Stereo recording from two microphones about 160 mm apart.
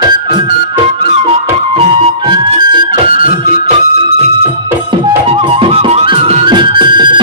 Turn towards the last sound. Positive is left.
turn(degrees=-30)  # may be behind; listen again after turning